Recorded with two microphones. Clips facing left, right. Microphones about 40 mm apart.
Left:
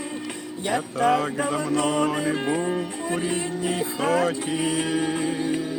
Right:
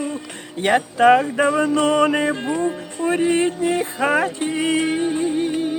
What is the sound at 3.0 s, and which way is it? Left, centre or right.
Music, right.